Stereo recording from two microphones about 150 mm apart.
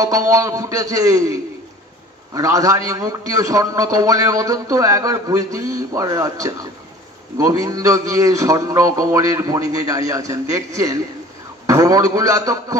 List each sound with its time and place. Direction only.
0.0 s a man's voice: 20° right (ahead or behind)